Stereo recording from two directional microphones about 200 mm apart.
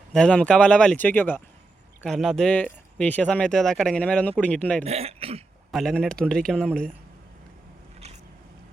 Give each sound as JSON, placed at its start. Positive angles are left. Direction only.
{"t": 0.1, "sound": "speech", "side_deg": 5}
{"t": 4.8, "sound": "speech", "side_deg": -30}
{"t": 5.7, "sound": "speech", "side_deg": 0}
{"t": 7.9, "sound": "biting", "side_deg": -35}